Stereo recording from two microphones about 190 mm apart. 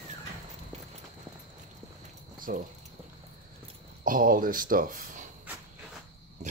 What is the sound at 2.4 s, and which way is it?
Cricket, 45° right (ahead or behind).